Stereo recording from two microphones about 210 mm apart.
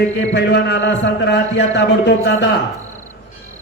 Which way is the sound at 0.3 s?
55° left (ahead or behind).